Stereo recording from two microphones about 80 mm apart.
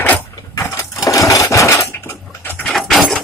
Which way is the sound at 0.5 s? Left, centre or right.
Left.